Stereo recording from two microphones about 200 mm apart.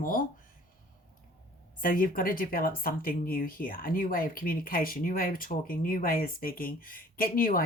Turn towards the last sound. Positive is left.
turn(degrees=45)  # may be behind; listen again after turning